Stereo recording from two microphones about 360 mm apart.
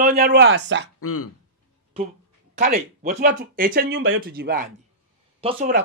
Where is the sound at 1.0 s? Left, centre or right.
Left.